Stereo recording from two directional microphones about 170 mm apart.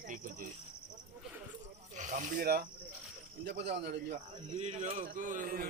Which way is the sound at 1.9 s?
45° right (ahead or behind).